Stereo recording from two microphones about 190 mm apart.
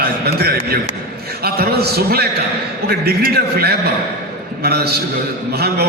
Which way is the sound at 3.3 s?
55° right (ahead or behind).